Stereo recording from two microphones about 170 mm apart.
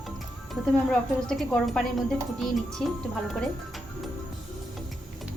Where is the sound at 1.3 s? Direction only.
Centre (ahead or behind).